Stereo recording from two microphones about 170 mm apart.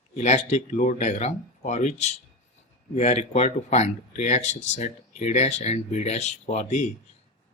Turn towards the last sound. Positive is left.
turn(degrees=45)  # may be behind; listen again after turning